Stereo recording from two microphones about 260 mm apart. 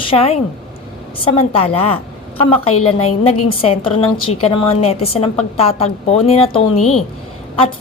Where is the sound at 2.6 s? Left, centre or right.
Left.